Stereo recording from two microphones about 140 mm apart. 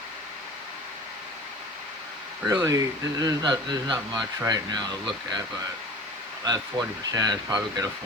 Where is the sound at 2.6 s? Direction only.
25° right (ahead or behind).